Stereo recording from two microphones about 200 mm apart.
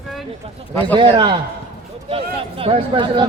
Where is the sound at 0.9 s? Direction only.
25° right (ahead or behind).